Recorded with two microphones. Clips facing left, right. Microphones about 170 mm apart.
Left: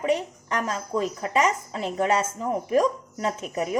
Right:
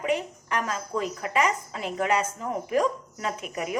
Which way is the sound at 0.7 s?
30° left (ahead or behind).